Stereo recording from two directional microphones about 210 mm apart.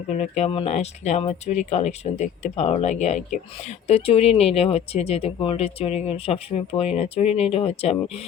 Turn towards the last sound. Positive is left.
turn(degrees=30)  # may be behind; listen again after turning